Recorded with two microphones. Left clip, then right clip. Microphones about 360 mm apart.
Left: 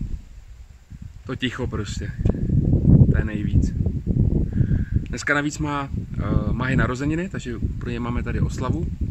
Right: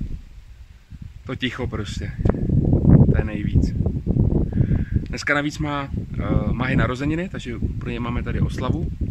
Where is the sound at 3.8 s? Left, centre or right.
Right.